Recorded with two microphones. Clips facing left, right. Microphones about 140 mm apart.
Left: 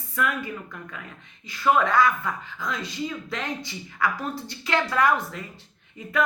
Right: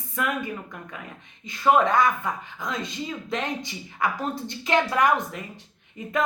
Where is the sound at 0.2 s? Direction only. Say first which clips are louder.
Even; 20° right (ahead or behind).